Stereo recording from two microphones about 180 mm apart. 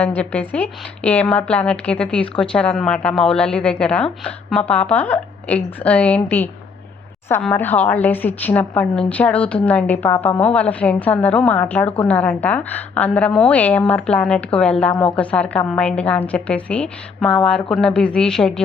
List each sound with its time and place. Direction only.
0.0 s a woman's voice: 10° left (ahead or behind)